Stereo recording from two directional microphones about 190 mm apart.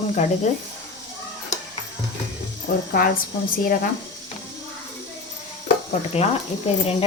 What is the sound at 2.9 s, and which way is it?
Speech, 50° left (ahead or behind).